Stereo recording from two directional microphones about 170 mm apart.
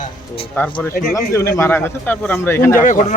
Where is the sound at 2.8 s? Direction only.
50° left (ahead or behind).